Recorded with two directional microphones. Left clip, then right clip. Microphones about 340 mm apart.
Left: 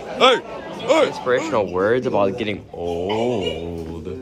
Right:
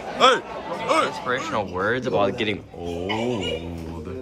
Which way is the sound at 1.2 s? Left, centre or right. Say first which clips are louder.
Left 6 dB; left.